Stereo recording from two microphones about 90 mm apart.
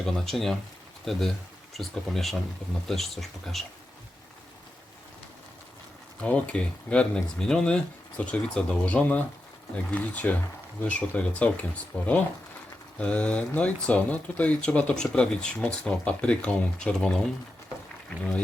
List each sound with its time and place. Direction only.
0.0 s speech: 5° left (ahead or behind)
6.2 s speech: 15° left (ahead or behind)
18.2 s speech: 15° left (ahead or behind)